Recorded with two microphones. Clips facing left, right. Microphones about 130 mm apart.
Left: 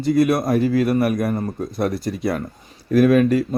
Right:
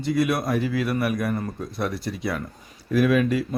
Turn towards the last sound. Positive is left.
turn(degrees=45)  # may be behind; listen again after turning